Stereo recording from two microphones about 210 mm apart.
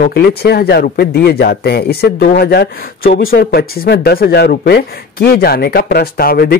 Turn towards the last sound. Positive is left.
turn(degrees=45)  # may be behind; listen again after turning